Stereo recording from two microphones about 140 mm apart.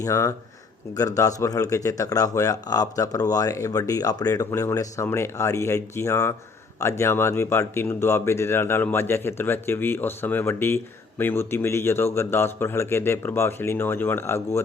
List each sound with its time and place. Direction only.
0.0 s speech: 25° left (ahead or behind)